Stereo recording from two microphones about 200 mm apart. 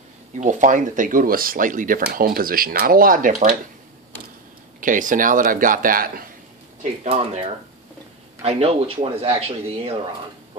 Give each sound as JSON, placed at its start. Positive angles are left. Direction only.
{"t": 0.4, "sound": "speech", "side_deg": -40}
{"t": 4.7, "sound": "speech", "side_deg": -40}
{"t": 6.8, "sound": "speech", "side_deg": -25}